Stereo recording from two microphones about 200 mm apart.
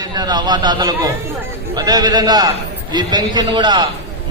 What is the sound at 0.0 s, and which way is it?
A man's voice, 20° right (ahead or behind).